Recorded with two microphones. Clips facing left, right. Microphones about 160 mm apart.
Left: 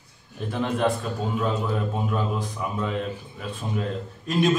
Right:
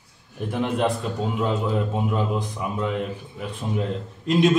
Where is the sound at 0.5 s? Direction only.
15° right (ahead or behind).